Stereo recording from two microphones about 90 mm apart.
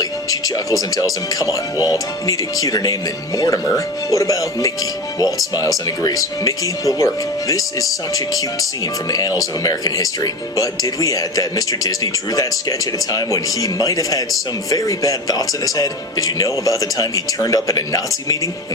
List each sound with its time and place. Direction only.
0.0 s speech: 40° left (ahead or behind)